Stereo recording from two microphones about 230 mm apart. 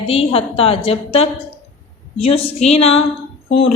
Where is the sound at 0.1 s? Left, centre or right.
Left.